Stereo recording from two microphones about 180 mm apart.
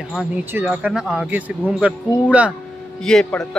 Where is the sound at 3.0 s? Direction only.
5° left (ahead or behind).